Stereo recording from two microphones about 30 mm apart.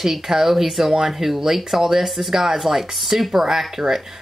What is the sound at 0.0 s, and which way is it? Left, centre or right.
Speech, centre.